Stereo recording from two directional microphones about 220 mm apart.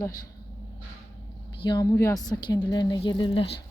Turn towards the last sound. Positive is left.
turn(degrees=20)  # may be behind; listen again after turning